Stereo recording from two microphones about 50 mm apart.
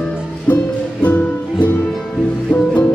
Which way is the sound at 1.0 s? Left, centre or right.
Left.